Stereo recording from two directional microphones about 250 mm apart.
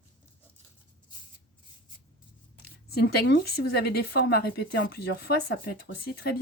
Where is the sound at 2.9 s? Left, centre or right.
Left.